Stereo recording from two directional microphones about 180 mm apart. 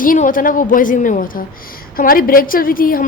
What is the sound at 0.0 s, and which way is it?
A woman's voice, 50° left (ahead or behind).